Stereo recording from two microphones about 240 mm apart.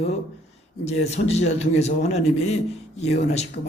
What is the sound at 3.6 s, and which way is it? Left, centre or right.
Speech, left.